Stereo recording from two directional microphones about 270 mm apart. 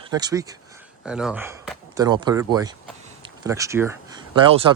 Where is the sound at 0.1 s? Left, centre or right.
Centre.